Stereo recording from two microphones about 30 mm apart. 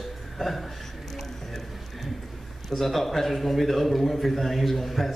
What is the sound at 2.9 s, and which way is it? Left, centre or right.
A man's voice, centre.